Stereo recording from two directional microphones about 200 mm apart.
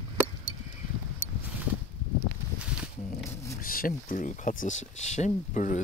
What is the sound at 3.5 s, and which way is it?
Speech, 45° left (ahead or behind).